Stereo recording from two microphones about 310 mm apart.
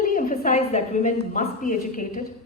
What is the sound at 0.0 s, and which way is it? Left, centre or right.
A woman's voice, left.